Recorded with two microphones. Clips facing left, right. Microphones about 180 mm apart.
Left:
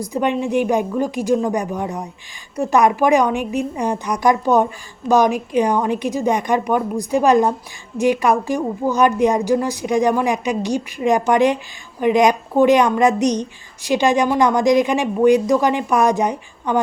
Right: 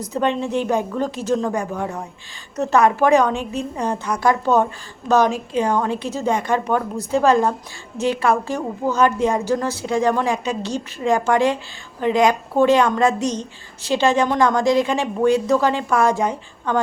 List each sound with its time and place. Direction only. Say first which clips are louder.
0.0 s a woman's voice: left 1 dB; 15° left (ahead or behind)